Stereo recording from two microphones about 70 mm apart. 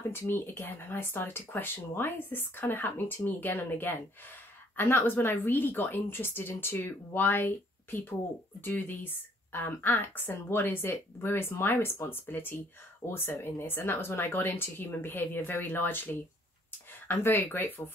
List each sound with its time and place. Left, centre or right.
0.1 s a woman's voice: left